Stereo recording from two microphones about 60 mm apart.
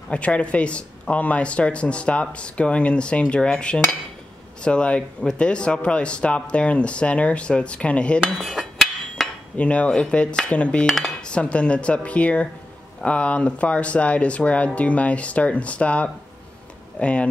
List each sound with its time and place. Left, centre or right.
0.1 s speech: left
8.4 s a sound: centre
9.6 s speech: left